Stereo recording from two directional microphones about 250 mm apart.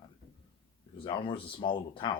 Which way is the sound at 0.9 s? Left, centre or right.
Centre.